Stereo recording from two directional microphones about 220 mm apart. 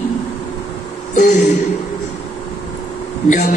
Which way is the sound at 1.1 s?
35° left (ahead or behind).